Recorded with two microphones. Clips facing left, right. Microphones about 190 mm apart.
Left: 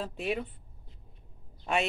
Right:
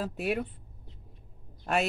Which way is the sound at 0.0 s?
5° right (ahead or behind).